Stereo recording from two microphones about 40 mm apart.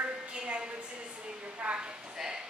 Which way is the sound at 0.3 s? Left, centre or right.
Right.